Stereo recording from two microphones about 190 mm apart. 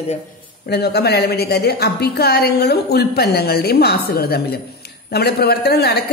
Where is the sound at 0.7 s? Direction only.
55° left (ahead or behind).